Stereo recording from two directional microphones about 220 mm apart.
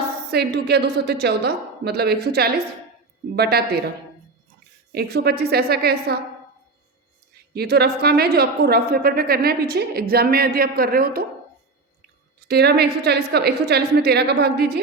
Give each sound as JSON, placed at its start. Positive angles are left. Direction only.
{"t": 0.3, "sound": "a woman's voice", "side_deg": -50}
{"t": 4.9, "sound": "a woman's voice", "side_deg": -45}
{"t": 7.5, "sound": "a woman's voice", "side_deg": -45}
{"t": 12.5, "sound": "a woman's voice", "side_deg": -45}